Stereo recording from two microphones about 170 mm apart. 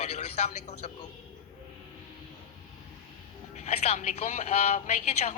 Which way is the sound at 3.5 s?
40° left (ahead or behind).